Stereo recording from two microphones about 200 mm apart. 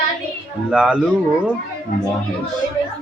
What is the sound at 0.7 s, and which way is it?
Speech, 5° right (ahead or behind).